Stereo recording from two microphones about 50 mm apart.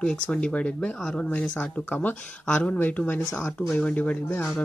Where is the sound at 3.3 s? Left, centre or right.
Left.